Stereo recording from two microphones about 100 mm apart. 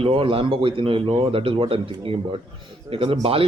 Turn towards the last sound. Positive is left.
turn(degrees=-65)  # may be behind; listen again after turning